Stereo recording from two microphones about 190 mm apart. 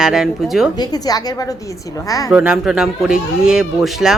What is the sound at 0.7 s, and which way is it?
A woman's voice, 20° left (ahead or behind).